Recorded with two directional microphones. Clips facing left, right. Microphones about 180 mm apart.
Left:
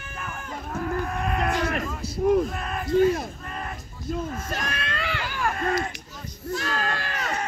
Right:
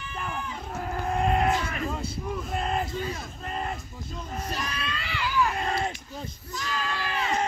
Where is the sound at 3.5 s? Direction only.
25° right (ahead or behind).